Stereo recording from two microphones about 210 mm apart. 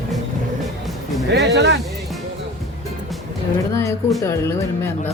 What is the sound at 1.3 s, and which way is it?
Speech, 55° right (ahead or behind).